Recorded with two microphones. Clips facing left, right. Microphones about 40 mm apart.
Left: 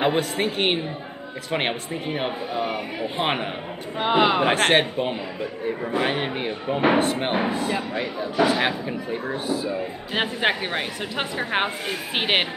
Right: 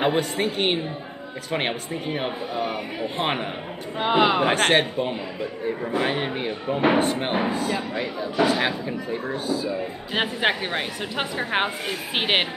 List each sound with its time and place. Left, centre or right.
0.4 s a woman's voice: centre
7.4 s speech: left
7.9 s speech: centre
9.5 s speech: left
10.1 s a woman's voice: centre